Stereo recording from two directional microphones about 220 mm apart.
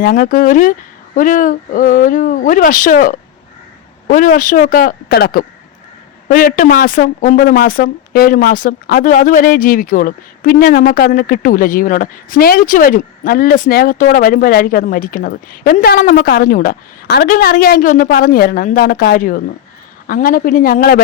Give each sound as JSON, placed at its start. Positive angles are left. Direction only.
{"t": 0.0, "sound": "speech", "side_deg": 40}